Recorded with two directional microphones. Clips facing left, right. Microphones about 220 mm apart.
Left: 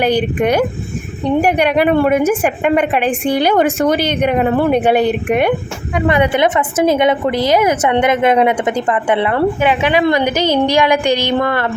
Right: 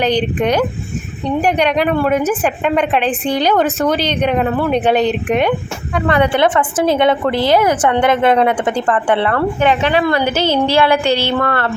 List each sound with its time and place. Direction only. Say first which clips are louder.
0.0 s a woman's voice: left 1 dB; 10° left (ahead or behind)